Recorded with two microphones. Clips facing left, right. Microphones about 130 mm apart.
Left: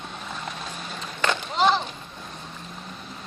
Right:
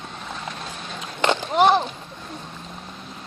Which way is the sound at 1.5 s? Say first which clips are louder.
Right 5 dB; 55° right (ahead or behind).